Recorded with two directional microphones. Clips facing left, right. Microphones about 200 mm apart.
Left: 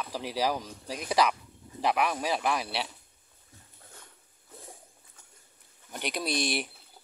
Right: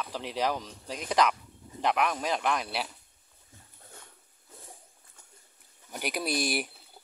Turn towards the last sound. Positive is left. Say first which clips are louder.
# even
turn(degrees=-5)  # may be behind; listen again after turning